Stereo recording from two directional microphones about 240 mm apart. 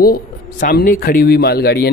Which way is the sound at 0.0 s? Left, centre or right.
Left.